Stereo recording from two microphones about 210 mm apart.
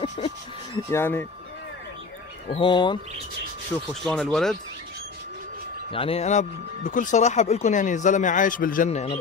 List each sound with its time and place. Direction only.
0.2 s a sound: 30° left (ahead or behind)
0.8 s speech: 10° left (ahead or behind)
2.5 s speech: 25° left (ahead or behind)
3.7 s speech: centre (ahead or behind)
5.9 s speech: 25° left (ahead or behind)